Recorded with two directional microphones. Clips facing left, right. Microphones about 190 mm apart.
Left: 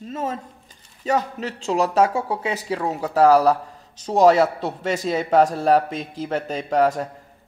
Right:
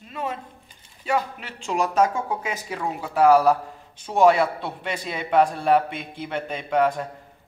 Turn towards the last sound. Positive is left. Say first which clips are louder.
# left 2 dB
turn(degrees=40)  # may be behind; listen again after turning